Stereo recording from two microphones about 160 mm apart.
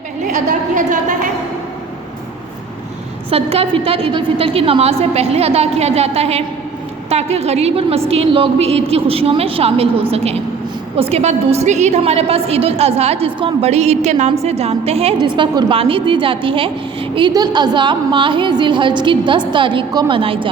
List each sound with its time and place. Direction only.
0.3 s a woman's voice: 55° right (ahead or behind)
3.2 s a woman's voice: 40° right (ahead or behind)